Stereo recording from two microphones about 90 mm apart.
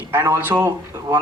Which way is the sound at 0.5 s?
40° right (ahead or behind).